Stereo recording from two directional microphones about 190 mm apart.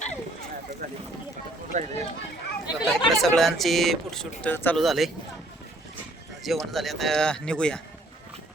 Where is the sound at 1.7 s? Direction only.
40° right (ahead or behind).